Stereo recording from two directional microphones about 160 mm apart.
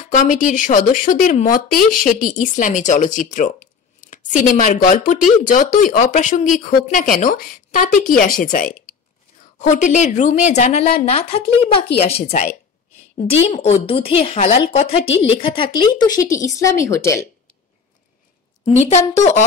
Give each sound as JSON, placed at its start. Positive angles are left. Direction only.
{"t": 0.0, "sound": "a woman's voice", "side_deg": 55}
{"t": 18.8, "sound": "speech", "side_deg": 45}